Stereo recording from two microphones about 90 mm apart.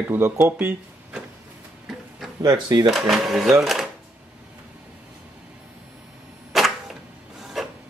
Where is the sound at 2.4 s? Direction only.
50° right (ahead or behind).